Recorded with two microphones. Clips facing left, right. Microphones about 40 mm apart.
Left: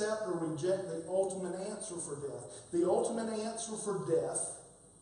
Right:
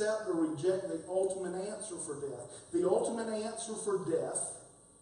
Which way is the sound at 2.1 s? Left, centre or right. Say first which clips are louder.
Right 1 dB; centre.